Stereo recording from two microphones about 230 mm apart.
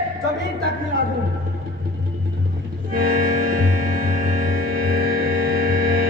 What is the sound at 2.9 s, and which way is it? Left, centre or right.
Music, right.